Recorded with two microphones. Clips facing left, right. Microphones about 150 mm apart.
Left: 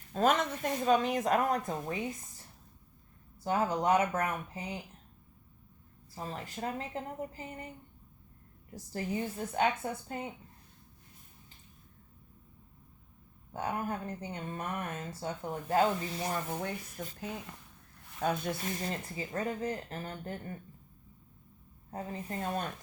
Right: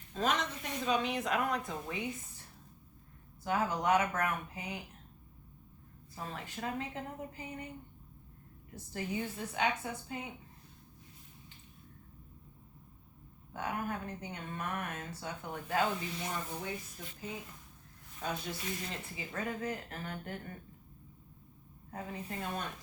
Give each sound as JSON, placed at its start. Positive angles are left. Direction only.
{"t": 0.1, "sound": "speech", "side_deg": 50}
{"t": 3.4, "sound": "speech", "side_deg": 30}
{"t": 6.1, "sound": "speech", "side_deg": 35}
{"t": 8.7, "sound": "speech", "side_deg": 35}
{"t": 13.5, "sound": "speech", "side_deg": 35}
{"t": 17.2, "sound": "speech", "side_deg": 75}
{"t": 18.1, "sound": "speech", "side_deg": 60}
{"t": 21.8, "sound": "speech", "side_deg": 35}